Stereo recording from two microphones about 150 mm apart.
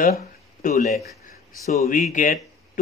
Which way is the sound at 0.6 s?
65° left (ahead or behind).